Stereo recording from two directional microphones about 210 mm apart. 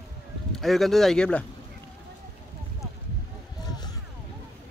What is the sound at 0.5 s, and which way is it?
Speech, centre (ahead or behind).